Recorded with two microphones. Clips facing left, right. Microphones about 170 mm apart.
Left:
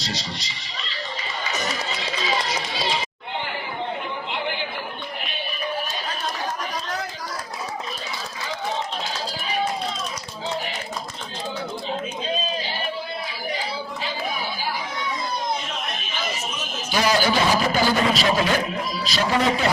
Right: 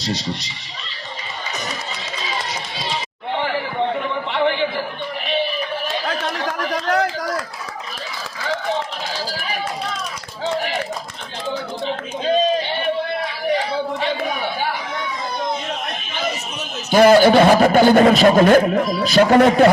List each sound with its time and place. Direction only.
0.0 s a man's voice: 55° right (ahead or behind)
3.3 s chatter: 65° right (ahead or behind)
5.9 s chatter: 85° right
9.1 s run: 80° right
10.4 s a sound: 80° right
11.9 s a sound: 80° right
13.7 s chatter: 65° right (ahead or behind)
16.9 s a man's voice: 55° right (ahead or behind)